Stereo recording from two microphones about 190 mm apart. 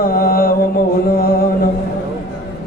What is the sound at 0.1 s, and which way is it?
Mantra, 50° left (ahead or behind).